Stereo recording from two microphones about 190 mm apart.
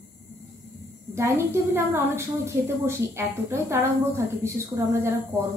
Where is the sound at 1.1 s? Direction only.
15° right (ahead or behind).